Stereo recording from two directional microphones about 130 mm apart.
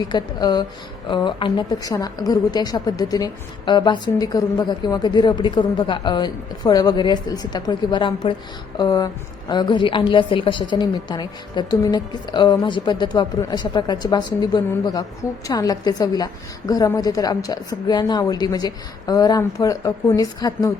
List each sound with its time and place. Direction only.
0.1 s a woman's voice: 30° left (ahead or behind)